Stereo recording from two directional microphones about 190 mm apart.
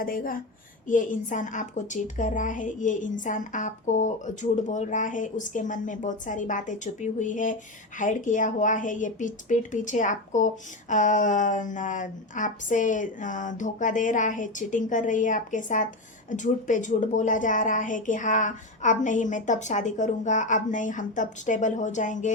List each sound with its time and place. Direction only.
0.0 s a woman's voice: 50° left (ahead or behind)